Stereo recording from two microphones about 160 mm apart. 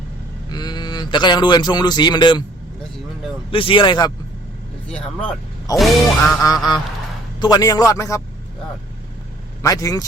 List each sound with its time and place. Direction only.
0.4 s a man's voice: 25° left (ahead or behind)
3.5 s speech: 35° left (ahead or behind)
4.9 s speech: 5° left (ahead or behind)
5.7 s music: centre (ahead or behind)
7.3 s a man's voice: 25° left (ahead or behind)
9.6 s a man's voice: 20° left (ahead or behind)